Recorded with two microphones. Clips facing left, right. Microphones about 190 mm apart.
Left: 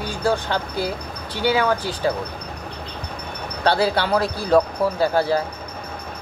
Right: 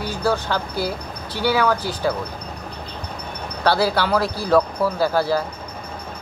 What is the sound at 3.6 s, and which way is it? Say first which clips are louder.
Speech: even; 20° left (ahead or behind).